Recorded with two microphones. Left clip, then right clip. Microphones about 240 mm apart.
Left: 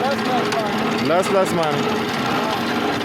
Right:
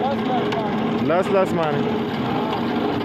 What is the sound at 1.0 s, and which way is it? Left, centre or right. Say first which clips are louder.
Speech: left 1 dB; centre.